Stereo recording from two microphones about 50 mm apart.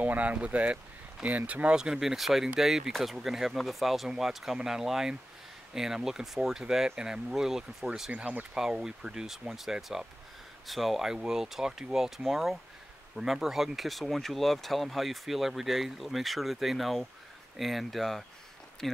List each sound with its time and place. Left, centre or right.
0.0 s speech: right
1.8 s speech: centre